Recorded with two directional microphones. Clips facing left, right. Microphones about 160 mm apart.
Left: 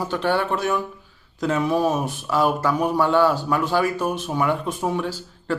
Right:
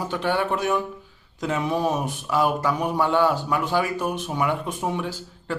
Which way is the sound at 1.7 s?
5° left (ahead or behind).